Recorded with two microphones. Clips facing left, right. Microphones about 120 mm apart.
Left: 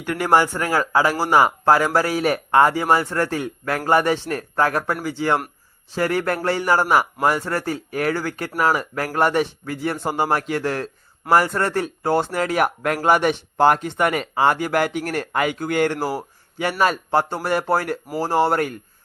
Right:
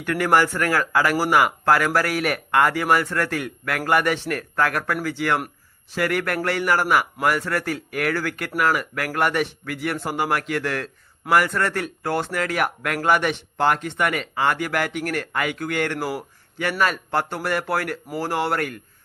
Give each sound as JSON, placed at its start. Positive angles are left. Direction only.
{"t": 0.0, "sound": "speech", "side_deg": 20}